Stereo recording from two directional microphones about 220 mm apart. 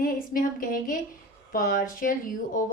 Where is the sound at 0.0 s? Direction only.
40° left (ahead or behind).